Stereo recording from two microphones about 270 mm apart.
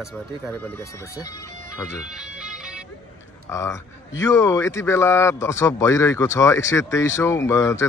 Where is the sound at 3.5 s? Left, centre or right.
Centre.